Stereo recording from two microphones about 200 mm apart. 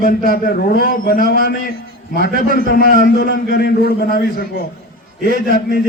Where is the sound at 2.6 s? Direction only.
50° left (ahead or behind).